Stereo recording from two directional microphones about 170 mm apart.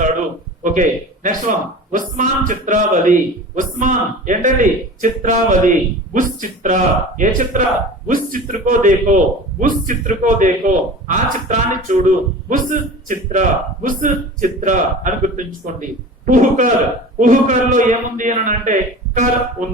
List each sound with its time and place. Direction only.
0.6 s a man's voice: 50° right (ahead or behind)